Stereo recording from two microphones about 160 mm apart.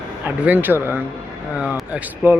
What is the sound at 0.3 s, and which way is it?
Speech, 10° right (ahead or behind).